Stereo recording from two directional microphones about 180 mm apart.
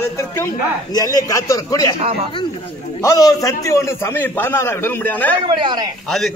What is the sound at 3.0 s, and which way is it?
A man's voice, 20° left (ahead or behind).